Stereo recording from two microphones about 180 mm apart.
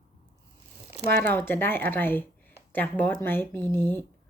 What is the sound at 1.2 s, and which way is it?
Speech, 10° left (ahead or behind).